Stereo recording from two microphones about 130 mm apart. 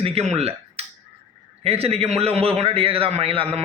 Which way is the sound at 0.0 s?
50° right (ahead or behind).